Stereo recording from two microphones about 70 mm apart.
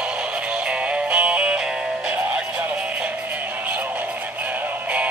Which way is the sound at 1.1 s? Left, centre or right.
Centre.